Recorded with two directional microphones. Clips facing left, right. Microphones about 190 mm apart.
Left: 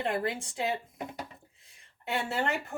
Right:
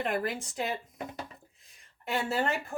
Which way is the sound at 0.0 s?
25° left (ahead or behind).